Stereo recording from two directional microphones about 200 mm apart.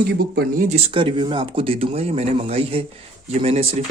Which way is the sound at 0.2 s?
50° right (ahead or behind).